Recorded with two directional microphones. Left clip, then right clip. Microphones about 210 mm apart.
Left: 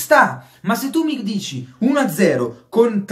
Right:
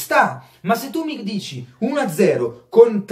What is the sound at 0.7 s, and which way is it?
Speech, 20° left (ahead or behind).